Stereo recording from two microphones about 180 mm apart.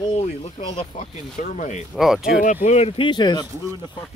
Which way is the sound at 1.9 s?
Centre (ahead or behind).